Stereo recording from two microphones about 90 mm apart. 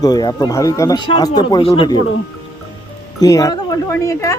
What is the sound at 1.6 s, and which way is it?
Speech, 90° left.